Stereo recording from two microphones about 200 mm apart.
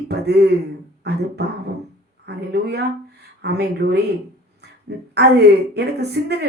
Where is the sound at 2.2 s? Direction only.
55° right (ahead or behind).